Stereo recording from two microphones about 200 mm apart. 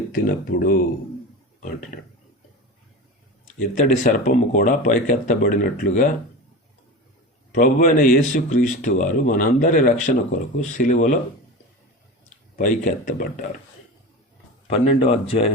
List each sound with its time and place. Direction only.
0.6 s speech: 45° left (ahead or behind)
3.6 s speech: 45° left (ahead or behind)
7.5 s speech: 45° left (ahead or behind)
12.5 s speech: 40° left (ahead or behind)
14.7 s speech: 30° left (ahead or behind)